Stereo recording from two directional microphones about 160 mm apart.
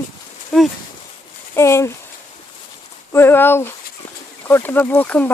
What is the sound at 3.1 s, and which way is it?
Speech, 15° left (ahead or behind).